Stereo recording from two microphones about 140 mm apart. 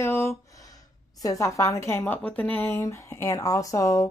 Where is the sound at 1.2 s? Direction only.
25° left (ahead or behind).